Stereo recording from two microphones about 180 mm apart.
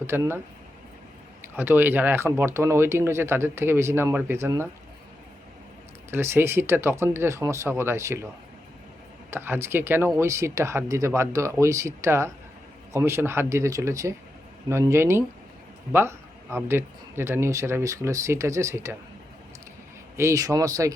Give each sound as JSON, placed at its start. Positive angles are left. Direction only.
{"t": 0.1, "sound": "speech", "side_deg": -15}
{"t": 1.5, "sound": "speech", "side_deg": -10}
{"t": 6.1, "sound": "speech", "side_deg": -15}
{"t": 9.3, "sound": "speech", "side_deg": -15}
{"t": 20.1, "sound": "speech", "side_deg": -15}